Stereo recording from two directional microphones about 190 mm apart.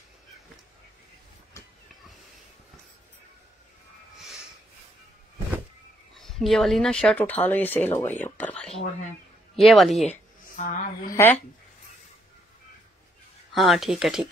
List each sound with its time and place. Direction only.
6.1 s speech: centre (ahead or behind)
10.0 s music: 40° left (ahead or behind)
11.1 s speech: 10° left (ahead or behind)
13.5 s speech: centre (ahead or behind)